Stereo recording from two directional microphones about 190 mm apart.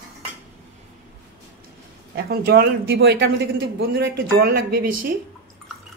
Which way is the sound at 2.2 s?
55° right (ahead or behind).